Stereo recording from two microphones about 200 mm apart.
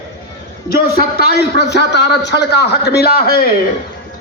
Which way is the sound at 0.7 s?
50° left (ahead or behind).